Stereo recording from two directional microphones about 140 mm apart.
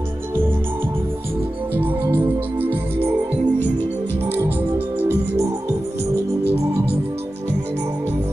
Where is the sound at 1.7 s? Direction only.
15° right (ahead or behind).